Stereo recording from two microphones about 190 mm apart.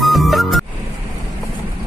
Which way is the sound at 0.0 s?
Centre (ahead or behind).